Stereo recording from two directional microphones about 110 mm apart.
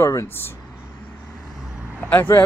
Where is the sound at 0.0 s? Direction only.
25° left (ahead or behind).